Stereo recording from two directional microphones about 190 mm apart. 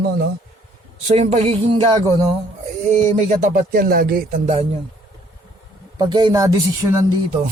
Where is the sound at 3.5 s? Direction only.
50° right (ahead or behind).